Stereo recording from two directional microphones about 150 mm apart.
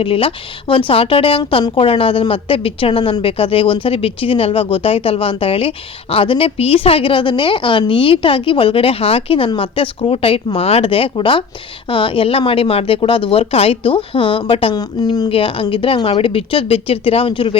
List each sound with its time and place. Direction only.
0.0 s speech: 40° left (ahead or behind)
15.3 s speech: 35° left (ahead or behind)